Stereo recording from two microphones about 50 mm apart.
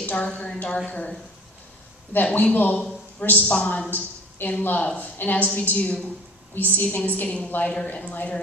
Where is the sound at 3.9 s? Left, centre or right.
Left.